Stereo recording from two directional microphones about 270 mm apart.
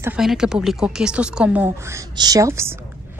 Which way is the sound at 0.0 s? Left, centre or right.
Centre.